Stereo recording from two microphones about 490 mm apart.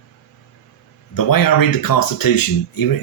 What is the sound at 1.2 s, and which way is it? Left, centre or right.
Speech, left.